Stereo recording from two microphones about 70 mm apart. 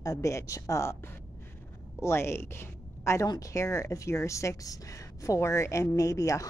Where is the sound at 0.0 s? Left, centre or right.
Left.